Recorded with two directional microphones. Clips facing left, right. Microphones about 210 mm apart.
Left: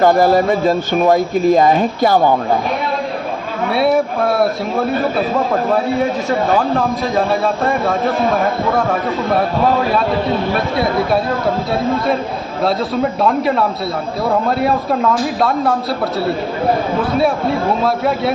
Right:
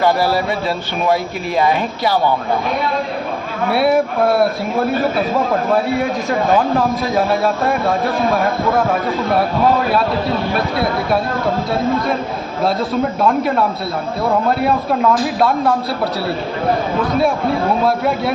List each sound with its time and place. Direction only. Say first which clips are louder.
0.0 s speech: left 4 dB; 45° left (ahead or behind)
3.7 s a man's voice: even; centre (ahead or behind)
6.7 s a man's voice: even; 5° right (ahead or behind)
13.2 s a man's voice: even; centre (ahead or behind)
15.4 s a man's voice: even; centre (ahead or behind)
17.8 s a man's voice: even; centre (ahead or behind)